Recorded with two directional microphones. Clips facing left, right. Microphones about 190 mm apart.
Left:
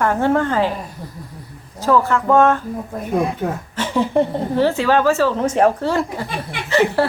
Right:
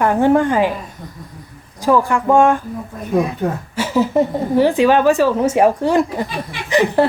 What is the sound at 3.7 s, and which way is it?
Speech, 5° right (ahead or behind).